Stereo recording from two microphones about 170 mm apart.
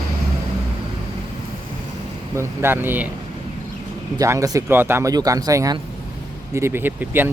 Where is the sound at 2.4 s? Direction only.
15° right (ahead or behind).